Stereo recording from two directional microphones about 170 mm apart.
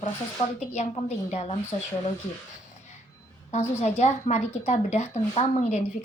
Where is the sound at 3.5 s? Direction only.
40° left (ahead or behind).